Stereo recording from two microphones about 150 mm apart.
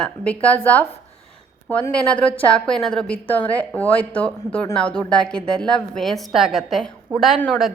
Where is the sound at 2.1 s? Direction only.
35° left (ahead or behind).